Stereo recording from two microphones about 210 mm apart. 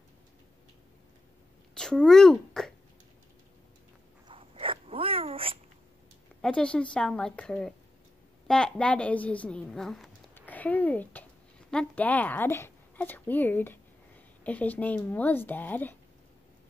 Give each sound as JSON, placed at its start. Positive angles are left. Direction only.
{"t": 1.8, "sound": "speech", "side_deg": 5}
{"t": 4.3, "sound": "dog", "side_deg": -25}
{"t": 6.4, "sound": "a woman's voice", "side_deg": 5}